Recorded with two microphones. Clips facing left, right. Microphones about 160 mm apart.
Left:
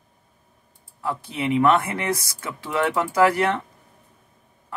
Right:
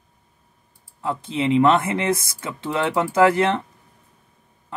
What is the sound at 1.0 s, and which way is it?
Speech, 20° right (ahead or behind).